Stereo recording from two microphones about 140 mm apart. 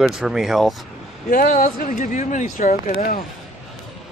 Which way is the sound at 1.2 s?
90° left.